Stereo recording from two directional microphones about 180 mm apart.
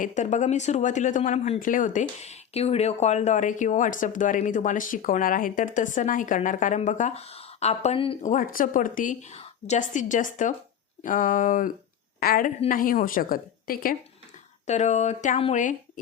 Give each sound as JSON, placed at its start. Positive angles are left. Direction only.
{"t": 0.0, "sound": "speech", "side_deg": 40}
{"t": 8.3, "sound": "speech", "side_deg": 50}
{"t": 14.7, "sound": "speech", "side_deg": 40}